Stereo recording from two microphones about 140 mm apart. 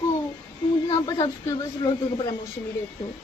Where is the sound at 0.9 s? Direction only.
25° left (ahead or behind).